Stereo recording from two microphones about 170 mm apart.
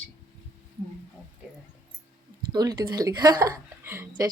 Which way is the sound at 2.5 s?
25° right (ahead or behind).